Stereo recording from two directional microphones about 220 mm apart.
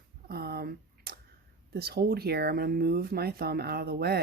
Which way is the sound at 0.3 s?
45° right (ahead or behind).